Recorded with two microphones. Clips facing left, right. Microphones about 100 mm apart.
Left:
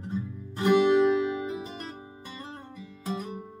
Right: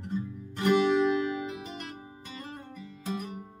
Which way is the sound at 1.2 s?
25° left (ahead or behind).